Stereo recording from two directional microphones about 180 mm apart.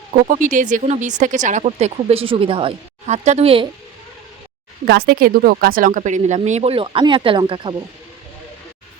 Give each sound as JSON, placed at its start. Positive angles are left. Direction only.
{"t": 0.1, "sound": "speech", "side_deg": -45}
{"t": 4.9, "sound": "speech", "side_deg": -60}